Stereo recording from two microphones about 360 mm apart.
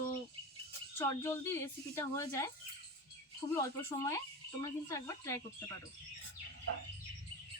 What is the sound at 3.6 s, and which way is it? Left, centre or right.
A woman's voice, centre.